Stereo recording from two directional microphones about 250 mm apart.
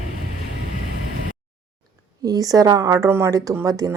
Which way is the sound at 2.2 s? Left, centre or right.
Centre.